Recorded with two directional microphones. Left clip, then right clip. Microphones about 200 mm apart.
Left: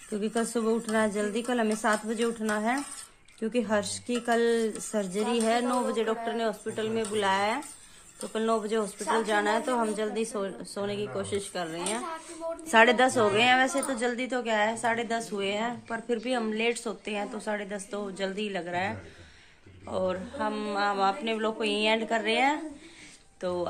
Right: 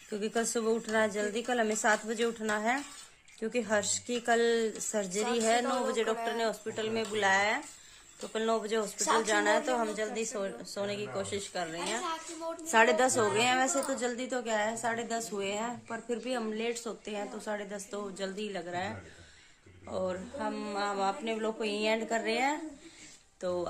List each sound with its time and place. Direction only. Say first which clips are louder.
0.1 s a woman's voice: left 2 dB; centre (ahead or behind)
8.9 s a woman's voice: right 2 dB; 45° right (ahead or behind)
9.2 s a woman's voice: left 3 dB; centre (ahead or behind)